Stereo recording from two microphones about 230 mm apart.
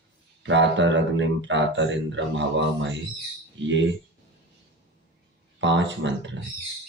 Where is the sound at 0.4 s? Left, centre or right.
Right.